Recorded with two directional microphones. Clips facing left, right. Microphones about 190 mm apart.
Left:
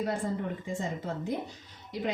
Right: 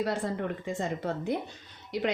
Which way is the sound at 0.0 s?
75° right (ahead or behind).